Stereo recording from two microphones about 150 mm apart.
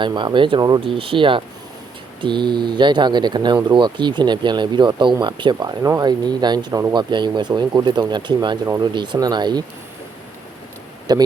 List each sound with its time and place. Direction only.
0.0 s speech: 30° right (ahead or behind)
11.1 s speech: 25° right (ahead or behind)